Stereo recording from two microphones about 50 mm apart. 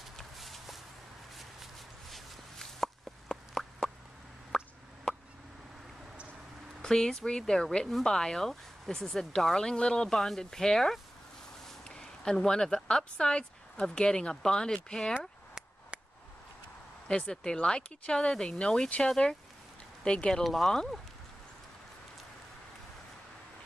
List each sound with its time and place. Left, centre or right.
0.2 s walk: centre
4.5 s a sound: centre
6.8 s speech: centre
8.0 s speech: centre
15.1 s a sound: right
17.1 s speech: centre
20.4 s speech: centre